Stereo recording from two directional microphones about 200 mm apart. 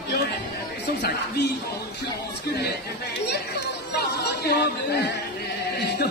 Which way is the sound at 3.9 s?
55° left (ahead or behind).